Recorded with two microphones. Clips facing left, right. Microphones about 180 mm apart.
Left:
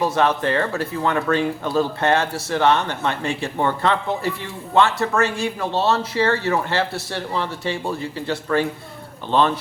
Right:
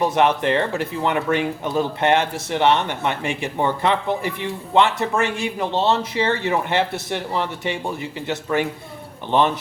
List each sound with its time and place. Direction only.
0.0 s speech: 20° right (ahead or behind)